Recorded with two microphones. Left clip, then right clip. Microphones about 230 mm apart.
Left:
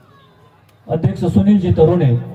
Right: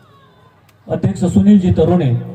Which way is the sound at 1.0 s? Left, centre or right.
Right.